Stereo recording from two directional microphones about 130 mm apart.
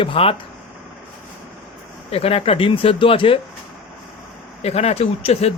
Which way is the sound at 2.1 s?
50° left (ahead or behind).